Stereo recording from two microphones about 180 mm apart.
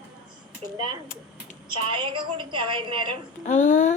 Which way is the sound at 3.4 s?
45° left (ahead or behind).